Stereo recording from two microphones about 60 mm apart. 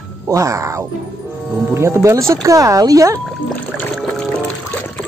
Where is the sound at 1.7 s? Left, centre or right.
Right.